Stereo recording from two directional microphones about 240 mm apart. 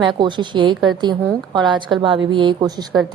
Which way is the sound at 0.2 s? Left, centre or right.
Centre.